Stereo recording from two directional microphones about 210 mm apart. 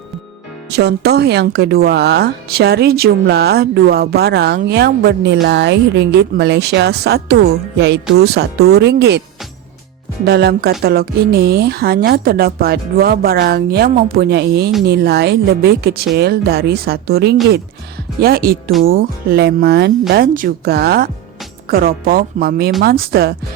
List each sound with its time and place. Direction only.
0.7 s speech: 50° right (ahead or behind)
10.2 s speech: 50° right (ahead or behind)